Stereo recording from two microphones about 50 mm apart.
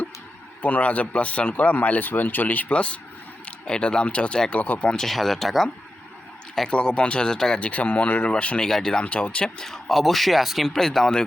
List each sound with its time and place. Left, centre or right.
0.6 s a man's voice: left
5.0 s speech: centre
6.7 s speech: centre
7.6 s speech: left
8.6 s speech: centre
9.6 s speech: centre